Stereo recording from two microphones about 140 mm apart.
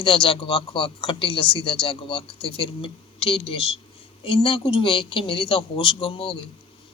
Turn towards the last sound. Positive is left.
turn(degrees=40)  # may be behind; listen again after turning